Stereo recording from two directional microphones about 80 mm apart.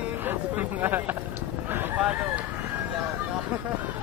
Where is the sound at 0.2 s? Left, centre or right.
Right.